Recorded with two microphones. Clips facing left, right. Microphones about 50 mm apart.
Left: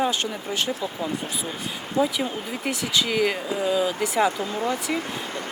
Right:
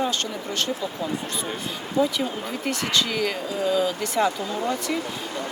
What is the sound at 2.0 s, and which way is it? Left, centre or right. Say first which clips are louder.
Speech: even; centre.